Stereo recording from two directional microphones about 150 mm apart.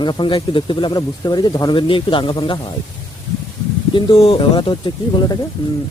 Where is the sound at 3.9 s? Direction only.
35° left (ahead or behind).